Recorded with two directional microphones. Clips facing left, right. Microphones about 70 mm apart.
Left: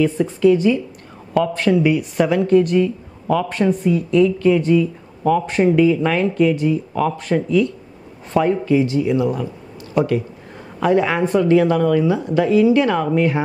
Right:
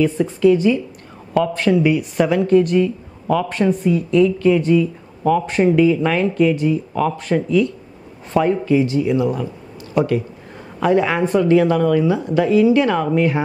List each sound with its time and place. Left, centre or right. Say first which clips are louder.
0.0 s speech: even; right